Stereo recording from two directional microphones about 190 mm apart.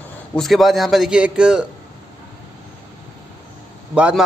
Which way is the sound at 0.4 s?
Centre (ahead or behind).